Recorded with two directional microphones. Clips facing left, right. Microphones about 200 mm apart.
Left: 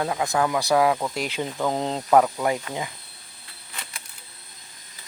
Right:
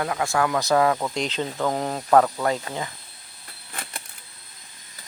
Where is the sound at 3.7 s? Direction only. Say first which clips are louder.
Right 4 dB; 50° right (ahead or behind).